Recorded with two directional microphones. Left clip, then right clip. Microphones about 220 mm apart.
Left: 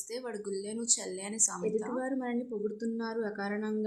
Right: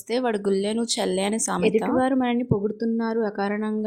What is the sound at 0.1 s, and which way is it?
Speech, 40° right (ahead or behind).